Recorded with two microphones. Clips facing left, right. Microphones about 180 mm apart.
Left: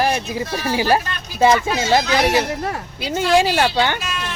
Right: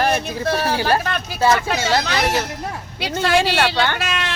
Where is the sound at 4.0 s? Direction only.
90° right.